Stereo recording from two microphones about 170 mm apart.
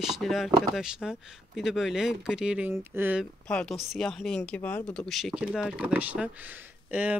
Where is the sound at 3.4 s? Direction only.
5° left (ahead or behind).